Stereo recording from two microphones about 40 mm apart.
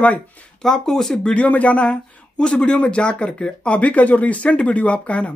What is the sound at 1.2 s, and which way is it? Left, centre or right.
Speech, left.